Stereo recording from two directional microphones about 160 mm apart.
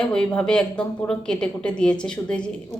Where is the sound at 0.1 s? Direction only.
5° left (ahead or behind).